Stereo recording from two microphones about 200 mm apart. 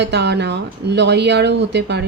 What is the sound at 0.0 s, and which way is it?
Speech, 60° right (ahead or behind).